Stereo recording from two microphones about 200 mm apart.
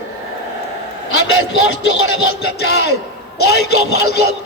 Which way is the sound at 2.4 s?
55° left (ahead or behind).